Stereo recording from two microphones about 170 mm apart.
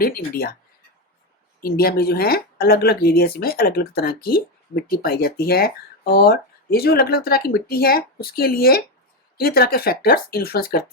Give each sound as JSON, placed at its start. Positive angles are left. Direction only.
{"t": 0.0, "sound": "speech", "side_deg": 60}
{"t": 1.6, "sound": "speech", "side_deg": 65}